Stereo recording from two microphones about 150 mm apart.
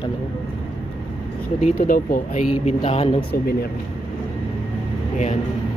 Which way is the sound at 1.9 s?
70° left (ahead or behind).